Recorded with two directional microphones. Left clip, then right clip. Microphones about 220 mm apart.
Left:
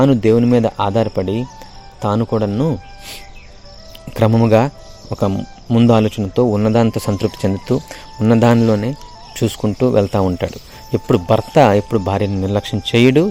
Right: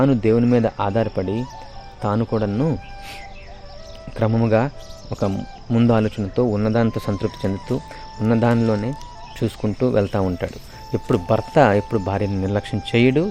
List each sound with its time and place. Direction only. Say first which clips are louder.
0.0 s speech: left 5 dB; 25° left (ahead or behind)
4.1 s speech: left 6 dB; 30° left (ahead or behind)